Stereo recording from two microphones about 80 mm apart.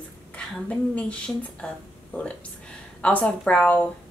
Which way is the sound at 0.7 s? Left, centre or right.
Centre.